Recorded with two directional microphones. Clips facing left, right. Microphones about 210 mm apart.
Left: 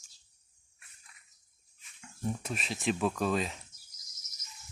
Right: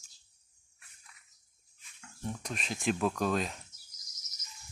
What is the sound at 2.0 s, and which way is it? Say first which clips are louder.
Speech: left 4 dB; 5° left (ahead or behind).